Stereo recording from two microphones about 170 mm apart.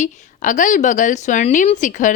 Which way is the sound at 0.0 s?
45° left (ahead or behind).